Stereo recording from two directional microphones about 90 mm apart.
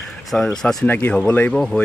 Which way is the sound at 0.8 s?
20° left (ahead or behind).